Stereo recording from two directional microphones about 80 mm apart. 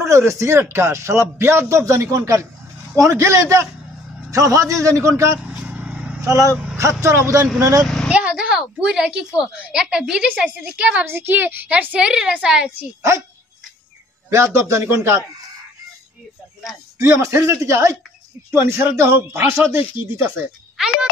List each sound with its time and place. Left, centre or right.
0.0 s a man's voice: right
5.6 s vehicle: centre
6.2 s a man's voice: right
7.8 s speech: centre
8.1 s a woman's voice: centre
11.1 s a woman's voice: right; by 12.7 s centre
14.3 s a man's voice: right
17.0 s a man's voice: right
20.7 s speech: centre